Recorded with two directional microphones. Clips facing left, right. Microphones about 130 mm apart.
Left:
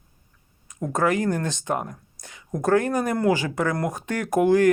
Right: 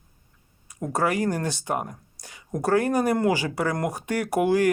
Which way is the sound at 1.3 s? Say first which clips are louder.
Left 1 dB; 10° right (ahead or behind).